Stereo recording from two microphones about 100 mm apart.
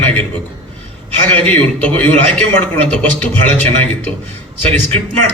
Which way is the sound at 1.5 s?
15° left (ahead or behind).